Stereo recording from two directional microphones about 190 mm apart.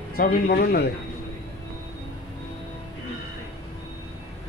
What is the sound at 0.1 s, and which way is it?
Speech, 55° left (ahead or behind).